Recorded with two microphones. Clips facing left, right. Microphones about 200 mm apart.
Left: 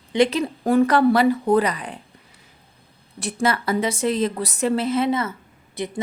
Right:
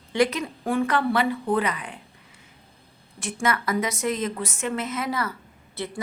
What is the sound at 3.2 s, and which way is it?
A woman's voice, 35° left (ahead or behind).